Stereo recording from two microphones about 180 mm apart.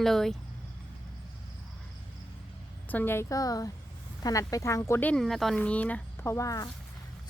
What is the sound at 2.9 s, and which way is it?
Speech, 10° left (ahead or behind).